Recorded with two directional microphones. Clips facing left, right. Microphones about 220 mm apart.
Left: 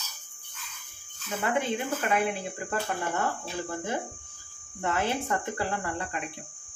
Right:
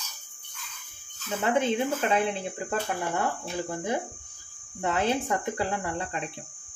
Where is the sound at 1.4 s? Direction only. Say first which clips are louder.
Right 4 dB; 20° right (ahead or behind).